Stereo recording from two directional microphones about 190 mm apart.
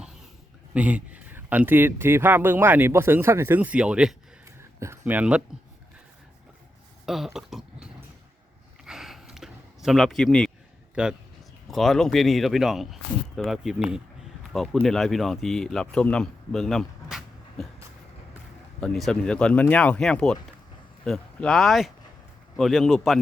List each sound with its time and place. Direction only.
0.7 s speech: 5° right (ahead or behind)
7.0 s dog: centre (ahead or behind)
8.8 s a sound: centre (ahead or behind)
11.0 s speech: 5° right (ahead or behind)
18.8 s speech: 5° left (ahead or behind)